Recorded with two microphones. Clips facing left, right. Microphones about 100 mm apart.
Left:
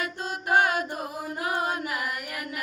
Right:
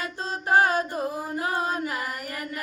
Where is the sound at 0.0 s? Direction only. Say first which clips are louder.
Right 1 dB; 35° right (ahead or behind).